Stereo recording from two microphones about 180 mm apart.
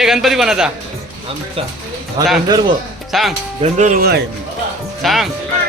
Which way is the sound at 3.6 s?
40° right (ahead or behind).